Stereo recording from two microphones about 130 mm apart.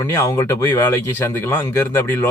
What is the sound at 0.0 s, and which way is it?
Speech, 20° left (ahead or behind).